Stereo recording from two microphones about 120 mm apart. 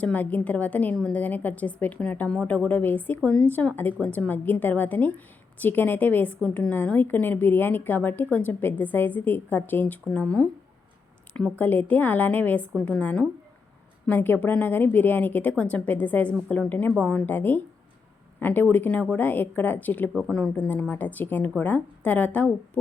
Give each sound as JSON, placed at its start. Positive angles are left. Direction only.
{"t": 0.0, "sound": "a woman's voice", "side_deg": 15}
{"t": 11.6, "sound": "a woman's voice", "side_deg": 15}
{"t": 20.1, "sound": "a woman's voice", "side_deg": 5}